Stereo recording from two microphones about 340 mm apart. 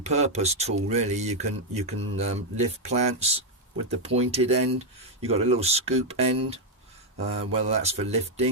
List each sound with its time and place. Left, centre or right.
0.0 s speech: centre